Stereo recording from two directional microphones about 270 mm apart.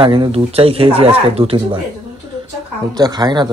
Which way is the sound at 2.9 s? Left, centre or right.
Centre.